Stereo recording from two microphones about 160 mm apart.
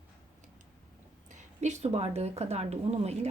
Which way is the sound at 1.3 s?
45° right (ahead or behind).